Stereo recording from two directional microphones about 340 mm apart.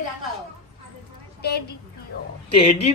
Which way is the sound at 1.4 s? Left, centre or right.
Left.